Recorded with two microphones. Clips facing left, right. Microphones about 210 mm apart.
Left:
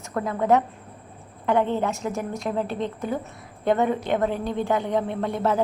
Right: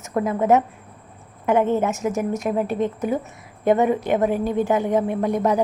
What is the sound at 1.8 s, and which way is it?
A woman's voice, 20° right (ahead or behind).